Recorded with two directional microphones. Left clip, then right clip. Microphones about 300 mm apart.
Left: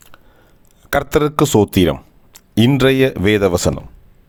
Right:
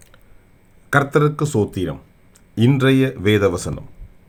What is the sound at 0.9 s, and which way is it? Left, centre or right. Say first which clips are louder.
Speech: left 1 dB; left.